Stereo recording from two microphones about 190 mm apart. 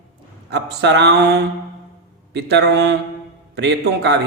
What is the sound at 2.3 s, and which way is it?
A man's voice, 65° right (ahead or behind).